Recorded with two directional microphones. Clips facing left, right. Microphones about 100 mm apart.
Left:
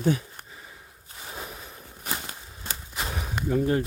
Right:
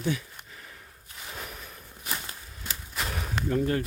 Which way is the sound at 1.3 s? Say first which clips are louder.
Left 2 dB; 20° left (ahead or behind).